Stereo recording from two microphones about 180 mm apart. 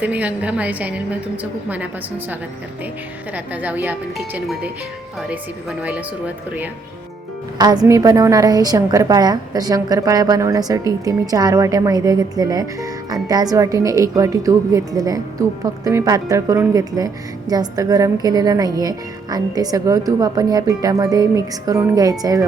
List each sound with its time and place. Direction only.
0.0 s a woman's voice: 10° right (ahead or behind)
3.3 s a woman's voice: 10° right (ahead or behind)
5.8 s a woman's voice: 10° right (ahead or behind)
7.6 s a woman's voice: 20° right (ahead or behind)